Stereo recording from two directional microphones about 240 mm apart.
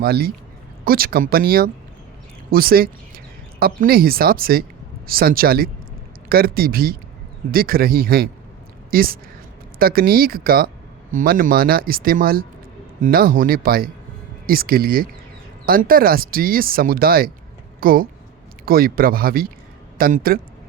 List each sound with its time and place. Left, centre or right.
0.0 s speech: right